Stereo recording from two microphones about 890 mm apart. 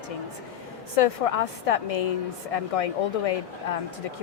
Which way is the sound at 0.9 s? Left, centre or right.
Left.